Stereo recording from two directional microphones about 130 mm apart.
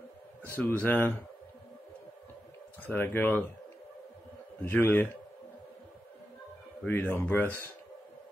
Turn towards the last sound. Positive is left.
turn(degrees=15)  # may be behind; listen again after turning